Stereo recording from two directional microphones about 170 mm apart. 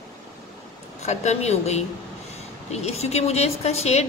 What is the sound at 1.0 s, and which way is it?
A woman's voice, 40° left (ahead or behind).